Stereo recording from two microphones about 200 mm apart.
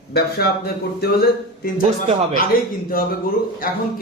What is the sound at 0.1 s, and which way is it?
Speech, 50° left (ahead or behind).